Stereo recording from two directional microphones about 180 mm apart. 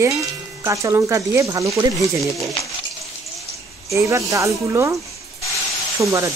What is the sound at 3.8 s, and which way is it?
Speech, 15° right (ahead or behind).